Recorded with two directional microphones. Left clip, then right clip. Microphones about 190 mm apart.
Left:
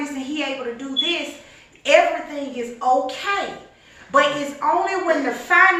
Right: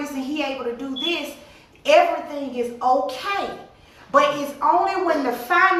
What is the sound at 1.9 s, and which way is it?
A woman's voice, 20° right (ahead or behind).